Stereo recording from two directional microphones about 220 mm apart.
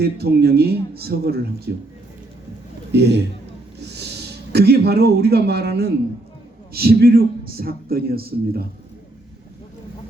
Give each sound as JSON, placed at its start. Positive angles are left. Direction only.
{"t": 0.0, "sound": "a man's voice", "side_deg": -45}
{"t": 2.9, "sound": "a man's voice", "side_deg": -50}